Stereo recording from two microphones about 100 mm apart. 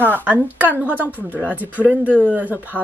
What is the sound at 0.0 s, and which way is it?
Speech, 20° right (ahead or behind).